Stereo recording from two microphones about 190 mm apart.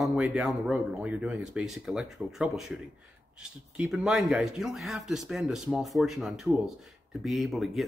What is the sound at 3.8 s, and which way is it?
Speech, centre (ahead or behind).